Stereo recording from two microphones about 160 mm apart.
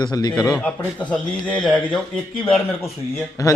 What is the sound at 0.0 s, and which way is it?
Speech, 25° left (ahead or behind).